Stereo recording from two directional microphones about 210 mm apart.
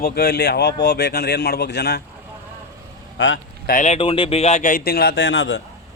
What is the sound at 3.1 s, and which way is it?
Speech, 65° left (ahead or behind).